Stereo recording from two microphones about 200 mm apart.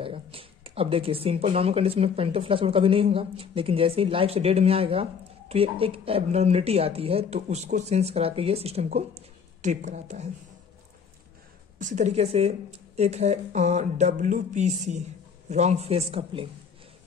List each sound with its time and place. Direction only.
0.0 s speech: 25° right (ahead or behind)
11.8 s speech: 35° right (ahead or behind)